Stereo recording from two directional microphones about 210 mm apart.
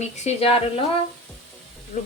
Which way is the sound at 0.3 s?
30° left (ahead or behind).